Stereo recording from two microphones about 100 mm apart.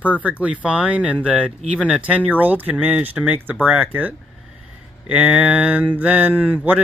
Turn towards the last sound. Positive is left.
turn(degrees=-15)  # may be behind; listen again after turning